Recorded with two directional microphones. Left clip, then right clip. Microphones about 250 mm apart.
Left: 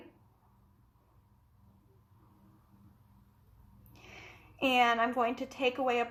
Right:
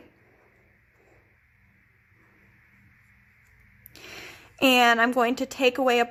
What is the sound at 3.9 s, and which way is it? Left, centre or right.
A woman's voice, right.